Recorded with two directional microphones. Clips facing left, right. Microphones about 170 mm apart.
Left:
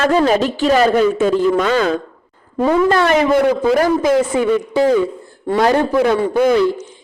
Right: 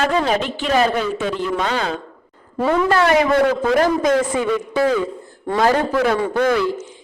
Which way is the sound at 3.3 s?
10° left (ahead or behind).